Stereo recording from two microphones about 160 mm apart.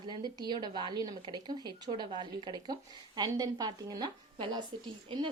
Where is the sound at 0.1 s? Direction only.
25° right (ahead or behind).